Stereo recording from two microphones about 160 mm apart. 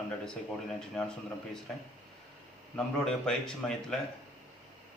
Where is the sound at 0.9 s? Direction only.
5° left (ahead or behind).